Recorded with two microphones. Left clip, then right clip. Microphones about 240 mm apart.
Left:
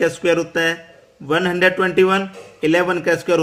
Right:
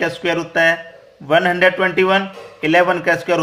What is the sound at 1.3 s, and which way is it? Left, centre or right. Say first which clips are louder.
Speech: right 3 dB; centre.